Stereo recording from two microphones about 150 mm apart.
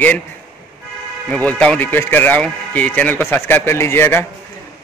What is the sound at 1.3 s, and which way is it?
A man's voice, 10° left (ahead or behind).